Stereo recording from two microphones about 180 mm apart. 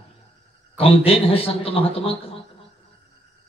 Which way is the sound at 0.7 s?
30° left (ahead or behind).